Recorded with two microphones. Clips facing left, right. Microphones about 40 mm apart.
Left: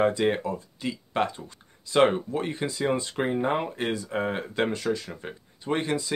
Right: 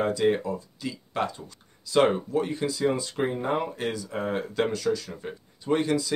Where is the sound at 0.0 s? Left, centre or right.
Left.